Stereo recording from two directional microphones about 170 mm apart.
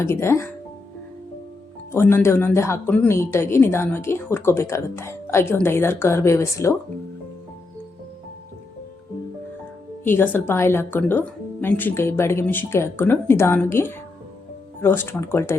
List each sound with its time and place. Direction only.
0.0 s speech: 15° left (ahead or behind)
1.9 s speech: 15° left (ahead or behind)
10.0 s speech: 10° left (ahead or behind)